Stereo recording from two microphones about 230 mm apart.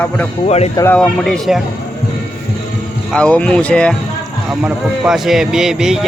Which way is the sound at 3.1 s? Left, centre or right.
Centre.